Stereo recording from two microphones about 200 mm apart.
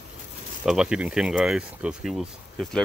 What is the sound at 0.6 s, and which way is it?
Speech, 5° right (ahead or behind).